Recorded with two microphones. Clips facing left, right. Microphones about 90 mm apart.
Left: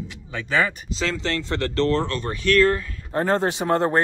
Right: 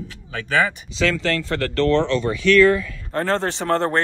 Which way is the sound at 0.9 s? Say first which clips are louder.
Right 4 dB; 30° left (ahead or behind).